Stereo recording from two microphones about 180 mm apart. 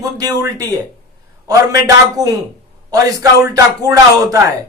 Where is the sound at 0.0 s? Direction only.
20° right (ahead or behind).